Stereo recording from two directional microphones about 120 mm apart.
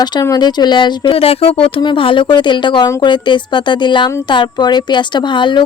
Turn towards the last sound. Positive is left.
turn(degrees=40)  # may be behind; listen again after turning